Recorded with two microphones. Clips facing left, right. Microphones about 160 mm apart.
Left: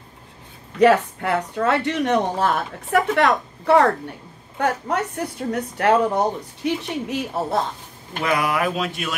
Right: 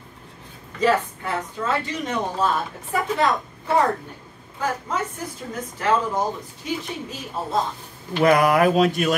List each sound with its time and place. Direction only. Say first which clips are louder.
0.7 s speech: left 5 dB; 65° left (ahead or behind)
8.2 s speech: right 5 dB; 45° right (ahead or behind)